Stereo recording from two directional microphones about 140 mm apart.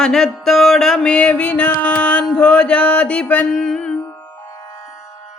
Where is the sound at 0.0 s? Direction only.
5° left (ahead or behind).